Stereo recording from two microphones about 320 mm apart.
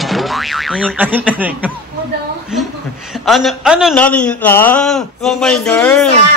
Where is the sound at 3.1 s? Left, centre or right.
Centre.